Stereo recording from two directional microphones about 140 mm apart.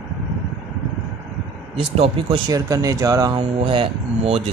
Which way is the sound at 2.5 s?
25° right (ahead or behind).